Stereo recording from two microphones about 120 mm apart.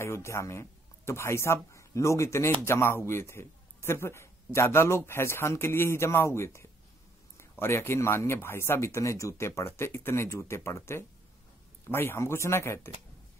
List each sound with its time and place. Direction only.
0.0 s a man's voice: 20° left (ahead or behind)